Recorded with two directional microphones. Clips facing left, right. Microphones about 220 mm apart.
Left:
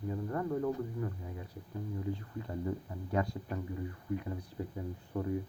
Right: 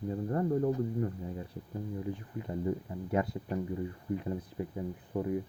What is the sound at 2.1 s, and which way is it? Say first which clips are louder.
Speech: right 2 dB; 20° right (ahead or behind).